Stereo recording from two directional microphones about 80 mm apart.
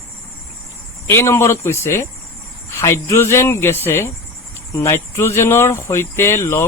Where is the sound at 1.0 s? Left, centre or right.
Left.